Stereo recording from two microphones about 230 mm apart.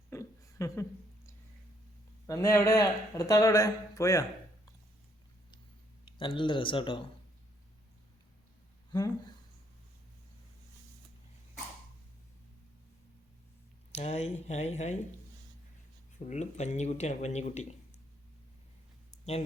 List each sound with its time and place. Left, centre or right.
0.1 s a sound: centre
2.2 s speech: centre
6.1 s speech: left
8.9 s speech: centre
13.9 s speech: left
16.1 s speech: left